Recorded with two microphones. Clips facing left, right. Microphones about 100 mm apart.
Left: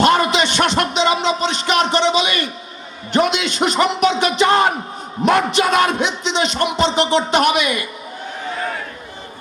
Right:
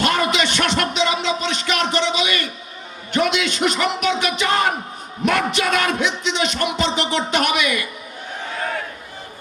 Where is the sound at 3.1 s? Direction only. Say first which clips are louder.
Left 2 dB; 30° left (ahead or behind).